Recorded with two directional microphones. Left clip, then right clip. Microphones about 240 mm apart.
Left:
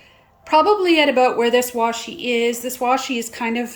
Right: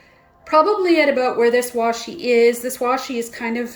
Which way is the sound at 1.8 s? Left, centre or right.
Left.